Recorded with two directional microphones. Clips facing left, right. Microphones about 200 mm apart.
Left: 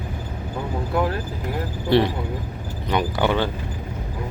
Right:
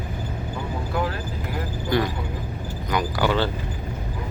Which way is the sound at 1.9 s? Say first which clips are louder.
Left 5 dB; 30° left (ahead or behind).